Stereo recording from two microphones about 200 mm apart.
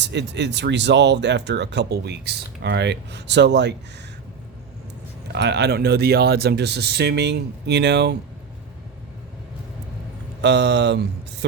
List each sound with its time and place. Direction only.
0.0 s speech: 60° right (ahead or behind)
5.3 s speech: 60° right (ahead or behind)
10.4 s speech: 60° right (ahead or behind)